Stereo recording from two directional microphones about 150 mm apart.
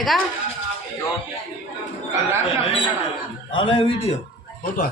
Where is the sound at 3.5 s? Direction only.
35° left (ahead or behind).